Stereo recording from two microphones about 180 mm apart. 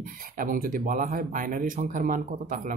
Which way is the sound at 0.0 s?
50° right (ahead or behind).